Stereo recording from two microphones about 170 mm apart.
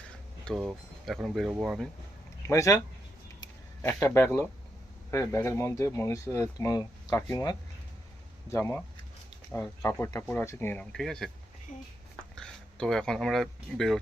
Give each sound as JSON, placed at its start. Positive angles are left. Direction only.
{"t": 0.6, "sound": "speech", "side_deg": 0}
{"t": 2.5, "sound": "speech", "side_deg": 20}
{"t": 12.4, "sound": "speech", "side_deg": 5}